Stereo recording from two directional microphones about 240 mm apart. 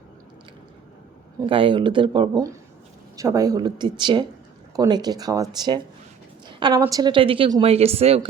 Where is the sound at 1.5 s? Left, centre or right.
Right.